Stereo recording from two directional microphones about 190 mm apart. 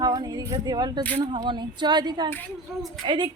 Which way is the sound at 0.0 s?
20° right (ahead or behind).